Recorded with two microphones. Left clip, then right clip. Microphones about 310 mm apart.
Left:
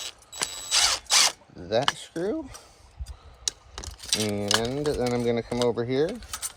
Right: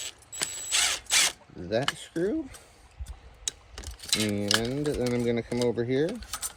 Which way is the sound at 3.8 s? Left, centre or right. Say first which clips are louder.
Left 1 dB; centre.